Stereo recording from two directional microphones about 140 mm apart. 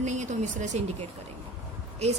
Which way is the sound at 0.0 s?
55° right (ahead or behind).